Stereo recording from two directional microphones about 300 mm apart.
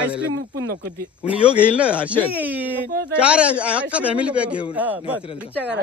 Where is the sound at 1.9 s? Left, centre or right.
Centre.